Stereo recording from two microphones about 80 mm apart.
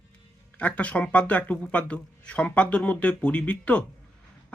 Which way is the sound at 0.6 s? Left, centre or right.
Centre.